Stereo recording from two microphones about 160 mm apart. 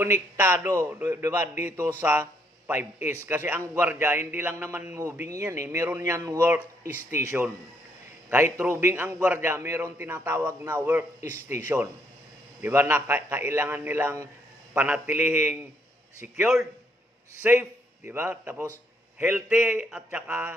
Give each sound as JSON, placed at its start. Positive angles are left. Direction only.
{"t": 0.0, "sound": "speech", "side_deg": -15}
{"t": 8.5, "sound": "a man's voice", "side_deg": -15}